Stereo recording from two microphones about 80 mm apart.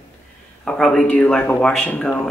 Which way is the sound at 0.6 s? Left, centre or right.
Centre.